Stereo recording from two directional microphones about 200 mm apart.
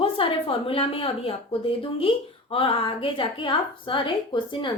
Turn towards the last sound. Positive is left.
turn(degrees=25)  # may be behind; listen again after turning